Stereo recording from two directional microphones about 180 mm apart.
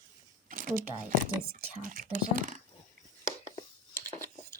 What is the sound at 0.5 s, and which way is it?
Shuffling cards, 50° right (ahead or behind).